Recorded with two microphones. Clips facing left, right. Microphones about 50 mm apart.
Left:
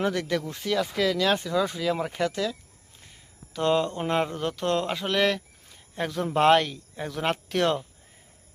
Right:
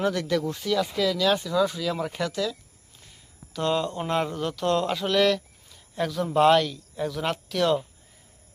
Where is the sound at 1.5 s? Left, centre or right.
Left.